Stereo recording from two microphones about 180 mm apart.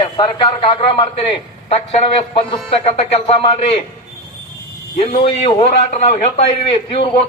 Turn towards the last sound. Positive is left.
turn(degrees=35)  # may be behind; listen again after turning